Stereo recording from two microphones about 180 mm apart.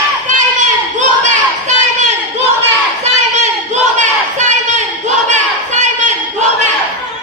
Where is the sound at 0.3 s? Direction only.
45° right (ahead or behind).